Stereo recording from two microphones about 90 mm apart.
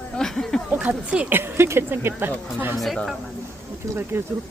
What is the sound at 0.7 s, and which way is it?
Speech, 15° right (ahead or behind).